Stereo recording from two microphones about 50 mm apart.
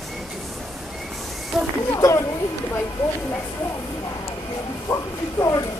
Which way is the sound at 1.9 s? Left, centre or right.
Left.